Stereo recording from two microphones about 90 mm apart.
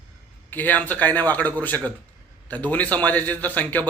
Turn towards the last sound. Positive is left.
turn(degrees=15)  # may be behind; listen again after turning